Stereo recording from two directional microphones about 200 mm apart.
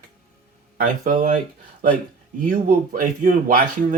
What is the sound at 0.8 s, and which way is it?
Speech, 40° right (ahead or behind).